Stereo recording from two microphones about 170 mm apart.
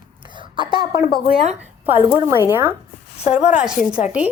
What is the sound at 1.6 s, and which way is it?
Speech, 10° right (ahead or behind).